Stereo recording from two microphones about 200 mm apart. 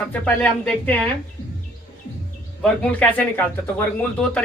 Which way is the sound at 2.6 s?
5° left (ahead or behind).